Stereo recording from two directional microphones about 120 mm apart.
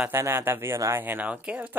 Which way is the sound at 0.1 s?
20° right (ahead or behind).